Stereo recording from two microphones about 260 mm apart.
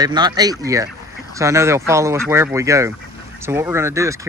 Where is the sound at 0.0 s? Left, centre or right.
Centre.